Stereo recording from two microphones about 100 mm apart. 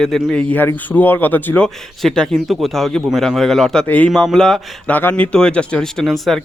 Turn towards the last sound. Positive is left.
turn(degrees=0)  # may be behind; listen again after turning